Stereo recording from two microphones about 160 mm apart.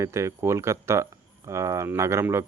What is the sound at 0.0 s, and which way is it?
Speech, 20° right (ahead or behind).